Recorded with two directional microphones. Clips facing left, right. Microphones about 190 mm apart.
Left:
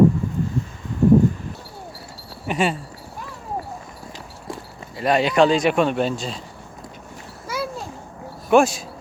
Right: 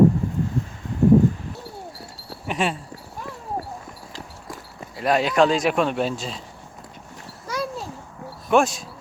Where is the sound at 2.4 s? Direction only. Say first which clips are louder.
Left 3 dB; centre (ahead or behind).